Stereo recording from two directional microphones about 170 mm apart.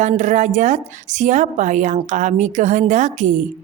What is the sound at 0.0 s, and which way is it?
A woman's voice, 45° right (ahead or behind).